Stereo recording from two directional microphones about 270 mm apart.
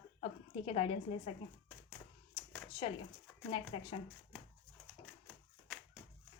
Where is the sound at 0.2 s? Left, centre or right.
Left.